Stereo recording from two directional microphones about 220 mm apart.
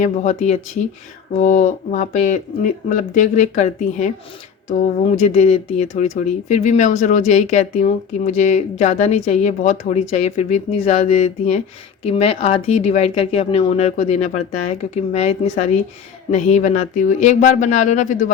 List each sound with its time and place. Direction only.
0.0 s speech: 35° left (ahead or behind)